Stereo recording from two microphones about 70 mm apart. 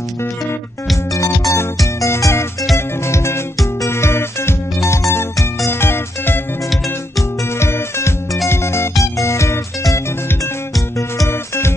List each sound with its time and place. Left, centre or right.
1.1 s music: left
7.5 s music: left